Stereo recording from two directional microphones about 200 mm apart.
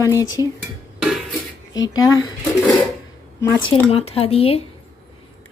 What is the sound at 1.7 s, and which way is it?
Speech, 20° left (ahead or behind).